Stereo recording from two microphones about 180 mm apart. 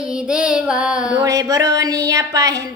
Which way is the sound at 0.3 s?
5° right (ahead or behind).